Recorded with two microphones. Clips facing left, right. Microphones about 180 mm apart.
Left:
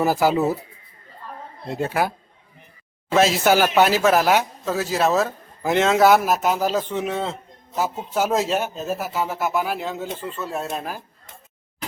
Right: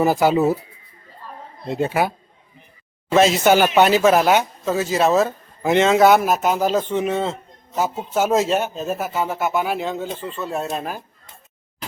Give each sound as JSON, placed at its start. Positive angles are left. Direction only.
{"t": 0.0, "sound": "speech", "side_deg": 0}
{"t": 1.6, "sound": "speech", "side_deg": 0}